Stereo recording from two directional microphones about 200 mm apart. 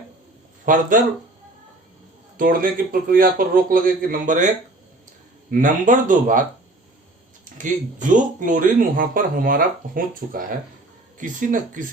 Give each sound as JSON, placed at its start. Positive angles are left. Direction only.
{"t": 0.6, "sound": "speech", "side_deg": -40}
{"t": 2.4, "sound": "a man's voice", "side_deg": -45}
{"t": 7.6, "sound": "a man's voice", "side_deg": -40}